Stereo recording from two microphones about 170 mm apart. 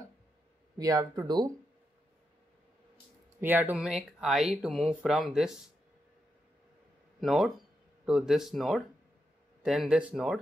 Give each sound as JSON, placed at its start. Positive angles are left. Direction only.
{"t": 0.7, "sound": "speech", "side_deg": -20}
{"t": 3.3, "sound": "speech", "side_deg": -10}
{"t": 7.2, "sound": "speech", "side_deg": 0}